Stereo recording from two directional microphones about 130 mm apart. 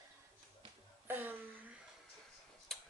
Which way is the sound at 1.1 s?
15° right (ahead or behind).